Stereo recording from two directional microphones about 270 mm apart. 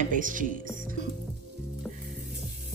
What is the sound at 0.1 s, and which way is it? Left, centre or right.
Speech, right.